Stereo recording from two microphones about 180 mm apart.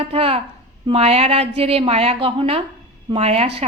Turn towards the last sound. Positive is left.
turn(degrees=-35)  # may be behind; listen again after turning